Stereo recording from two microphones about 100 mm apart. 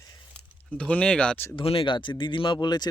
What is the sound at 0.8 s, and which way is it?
Speech, 10° left (ahead or behind).